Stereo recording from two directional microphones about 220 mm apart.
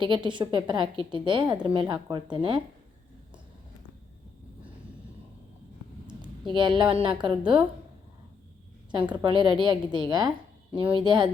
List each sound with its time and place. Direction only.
0.0 s a woman's voice: 20° right (ahead or behind)
6.5 s a woman's voice: 20° right (ahead or behind)
8.9 s a woman's voice: 20° right (ahead or behind)